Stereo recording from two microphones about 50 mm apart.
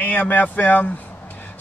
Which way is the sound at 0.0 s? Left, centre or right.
Left.